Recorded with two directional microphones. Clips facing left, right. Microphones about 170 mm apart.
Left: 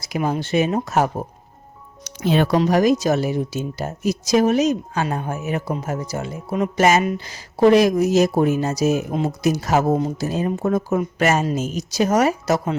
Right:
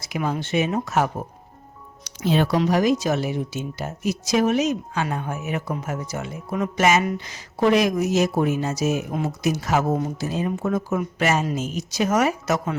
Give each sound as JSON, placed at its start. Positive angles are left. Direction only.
{"t": 0.2, "sound": "speech", "side_deg": 30}
{"t": 2.0, "sound": "speech", "side_deg": 60}
{"t": 2.6, "sound": "speech", "side_deg": 45}